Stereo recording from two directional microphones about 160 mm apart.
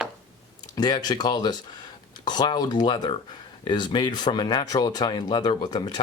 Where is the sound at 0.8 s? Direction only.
25° left (ahead or behind).